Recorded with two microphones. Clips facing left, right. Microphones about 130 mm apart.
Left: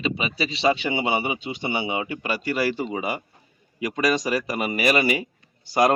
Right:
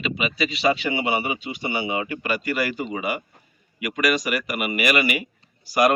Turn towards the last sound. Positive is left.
turn(degrees=25)  # may be behind; listen again after turning